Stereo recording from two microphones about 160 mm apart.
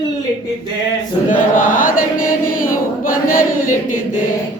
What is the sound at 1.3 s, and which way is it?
Chant, 55° left (ahead or behind).